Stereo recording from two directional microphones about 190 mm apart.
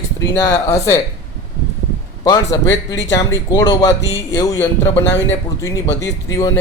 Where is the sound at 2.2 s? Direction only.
20° left (ahead or behind).